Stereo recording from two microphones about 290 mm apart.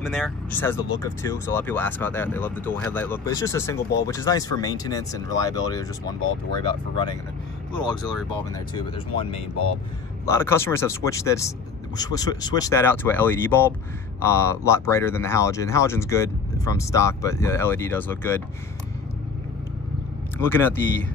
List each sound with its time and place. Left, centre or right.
0.0 s speech: centre
7.7 s speech: centre
10.3 s speech: centre
20.3 s speech: centre